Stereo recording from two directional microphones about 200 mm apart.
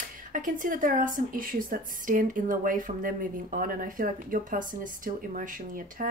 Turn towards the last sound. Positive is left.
turn(degrees=-45)  # may be behind; listen again after turning